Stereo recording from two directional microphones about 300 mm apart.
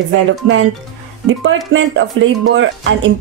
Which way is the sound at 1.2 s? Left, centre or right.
Right.